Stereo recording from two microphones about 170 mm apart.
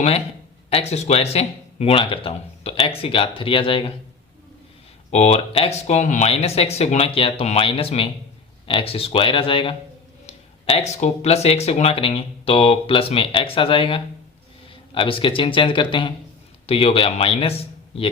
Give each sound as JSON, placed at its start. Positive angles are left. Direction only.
{"t": 0.7, "sound": "speech", "side_deg": 40}
{"t": 5.1, "sound": "speech", "side_deg": 40}